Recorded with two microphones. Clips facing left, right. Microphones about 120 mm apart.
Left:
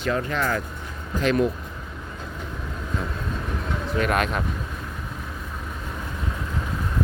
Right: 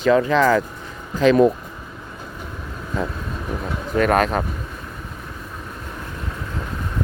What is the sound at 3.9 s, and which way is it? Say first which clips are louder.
Speech: right 6 dB; 40° right (ahead or behind).